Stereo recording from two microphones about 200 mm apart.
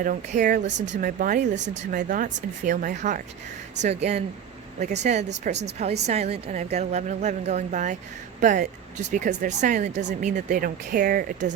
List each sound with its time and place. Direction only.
0.0 s a woman's voice: 40° right (ahead or behind)
0.7 s speech: 65° right (ahead or behind)
1.0 s a woman's voice: 40° right (ahead or behind)
1.5 s speech: 60° right (ahead or behind)
1.9 s a woman's voice: 40° right (ahead or behind)